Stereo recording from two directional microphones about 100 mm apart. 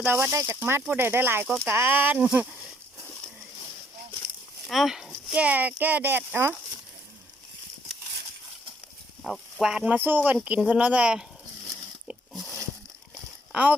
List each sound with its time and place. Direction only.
0.0 s speech: 20° right (ahead or behind)
4.6 s speech: centre (ahead or behind); by 6.6 s 20° right (ahead or behind)
9.2 s speech: centre (ahead or behind)
9.9 s speech: 20° right (ahead or behind)
12.3 s a sound: centre (ahead or behind)
13.5 s speech: 15° right (ahead or behind)